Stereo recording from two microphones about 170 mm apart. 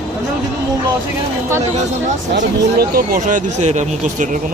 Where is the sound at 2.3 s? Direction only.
60° right (ahead or behind).